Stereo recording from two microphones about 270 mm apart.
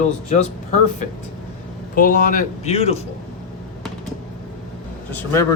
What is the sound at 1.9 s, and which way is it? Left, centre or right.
Speech, left.